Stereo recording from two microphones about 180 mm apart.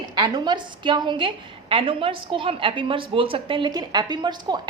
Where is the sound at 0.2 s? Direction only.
25° right (ahead or behind).